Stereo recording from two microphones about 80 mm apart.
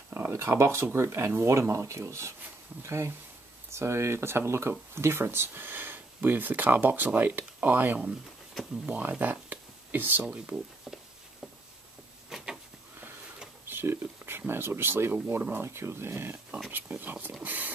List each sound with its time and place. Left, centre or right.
0.1 s speech: right; by 10.6 s centre
12.3 s a sound: centre
13.7 s speech: right